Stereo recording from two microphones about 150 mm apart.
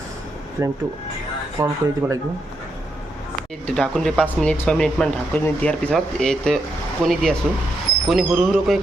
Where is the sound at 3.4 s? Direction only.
5° left (ahead or behind).